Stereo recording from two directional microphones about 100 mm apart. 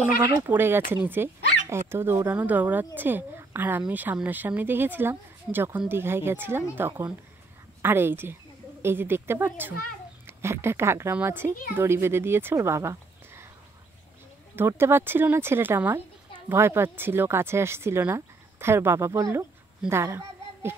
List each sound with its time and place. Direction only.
0.4 s speech: 20° right (ahead or behind)
14.5 s a child's voice: 25° right (ahead or behind)